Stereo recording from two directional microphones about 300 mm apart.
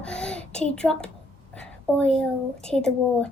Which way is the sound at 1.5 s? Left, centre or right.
Centre.